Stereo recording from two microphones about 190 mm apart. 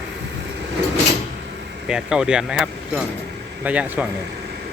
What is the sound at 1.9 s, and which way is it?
A man's voice, 5° right (ahead or behind).